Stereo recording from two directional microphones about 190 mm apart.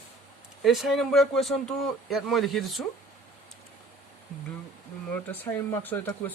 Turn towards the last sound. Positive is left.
turn(degrees=10)  # may be behind; listen again after turning